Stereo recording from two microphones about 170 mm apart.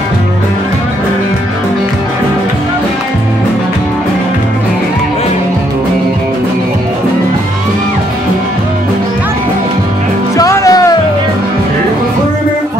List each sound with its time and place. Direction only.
10.3 s music: 20° left (ahead or behind)